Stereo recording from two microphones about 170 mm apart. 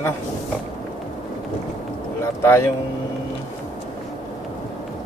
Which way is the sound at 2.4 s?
15° left (ahead or behind).